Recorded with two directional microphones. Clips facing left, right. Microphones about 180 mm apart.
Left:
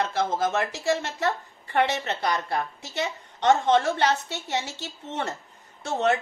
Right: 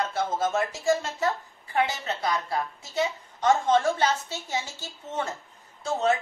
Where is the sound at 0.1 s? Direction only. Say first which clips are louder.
Left 1 dB; 75° left (ahead or behind).